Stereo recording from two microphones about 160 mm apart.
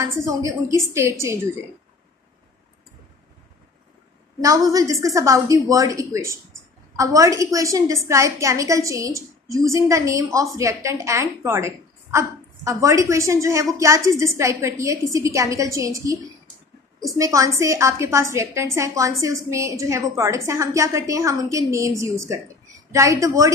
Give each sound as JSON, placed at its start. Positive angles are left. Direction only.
{"t": 0.2, "sound": "a woman's voice", "side_deg": -20}
{"t": 4.4, "sound": "a woman's voice", "side_deg": -20}